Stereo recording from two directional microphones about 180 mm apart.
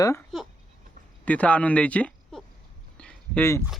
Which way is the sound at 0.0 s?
15° left (ahead or behind).